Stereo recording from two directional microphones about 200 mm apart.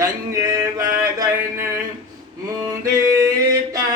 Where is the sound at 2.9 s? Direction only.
15° right (ahead or behind).